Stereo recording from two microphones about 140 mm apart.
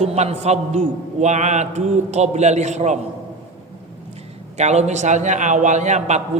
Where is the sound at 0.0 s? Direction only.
50° right (ahead or behind).